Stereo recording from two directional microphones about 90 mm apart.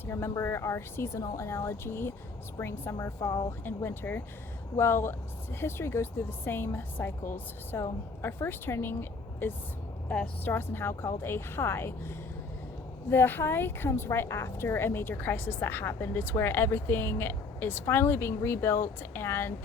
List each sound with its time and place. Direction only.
0.0 s a woman's voice: 30° left (ahead or behind)
3.6 s a woman's voice: 25° left (ahead or behind)